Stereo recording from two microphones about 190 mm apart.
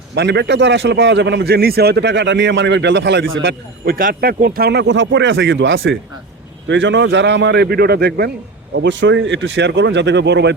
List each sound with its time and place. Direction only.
0.1 s a man's voice: 65° right (ahead or behind)
3.9 s a man's voice: 50° right (ahead or behind); by 6.0 s 85° right
6.7 s a man's voice: 75° right (ahead or behind)
8.7 s a man's voice: 70° right (ahead or behind)